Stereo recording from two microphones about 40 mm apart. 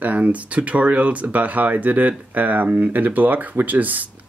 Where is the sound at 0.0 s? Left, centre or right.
Right.